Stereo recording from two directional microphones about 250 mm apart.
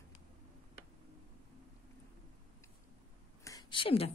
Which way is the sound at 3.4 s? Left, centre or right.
Centre.